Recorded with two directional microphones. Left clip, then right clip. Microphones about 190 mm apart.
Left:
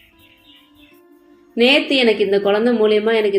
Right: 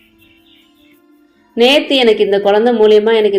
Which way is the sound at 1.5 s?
20° right (ahead or behind).